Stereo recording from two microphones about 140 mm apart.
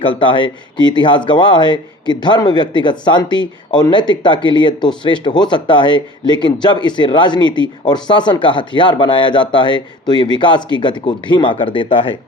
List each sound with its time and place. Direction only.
0.0 s speech: 35° left (ahead or behind)